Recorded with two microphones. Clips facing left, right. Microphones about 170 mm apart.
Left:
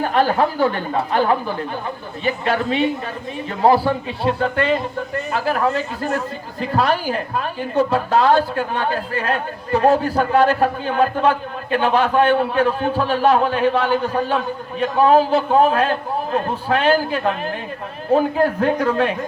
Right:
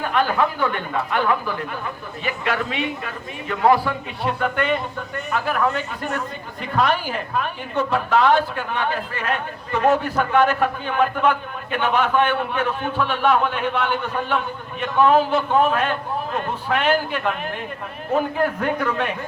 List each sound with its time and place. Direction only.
0.0 s speech: 35° left (ahead or behind)